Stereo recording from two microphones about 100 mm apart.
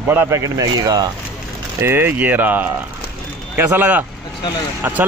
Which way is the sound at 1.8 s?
25° right (ahead or behind).